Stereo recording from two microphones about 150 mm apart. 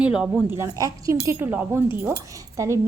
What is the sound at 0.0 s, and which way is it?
Speech, 5° right (ahead or behind).